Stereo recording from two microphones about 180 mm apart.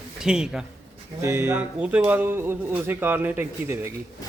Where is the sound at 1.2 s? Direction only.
15° right (ahead or behind).